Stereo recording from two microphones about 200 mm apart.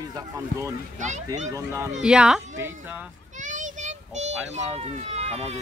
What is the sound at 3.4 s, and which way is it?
A child's voice, 40° right (ahead or behind).